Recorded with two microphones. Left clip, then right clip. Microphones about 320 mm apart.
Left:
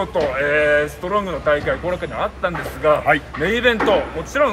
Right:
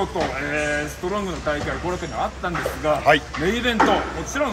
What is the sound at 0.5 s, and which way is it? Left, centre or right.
Speech, left.